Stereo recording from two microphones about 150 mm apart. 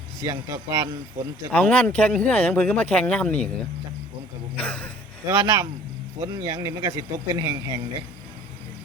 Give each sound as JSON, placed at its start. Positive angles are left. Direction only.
{"t": 0.2, "sound": "a man's voice", "side_deg": -20}
{"t": 1.5, "sound": "speech", "side_deg": 10}
{"t": 4.5, "sound": "speech", "side_deg": 10}
{"t": 5.2, "sound": "a man's voice", "side_deg": -20}